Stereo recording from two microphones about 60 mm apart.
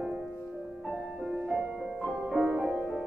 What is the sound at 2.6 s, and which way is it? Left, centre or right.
Music, centre.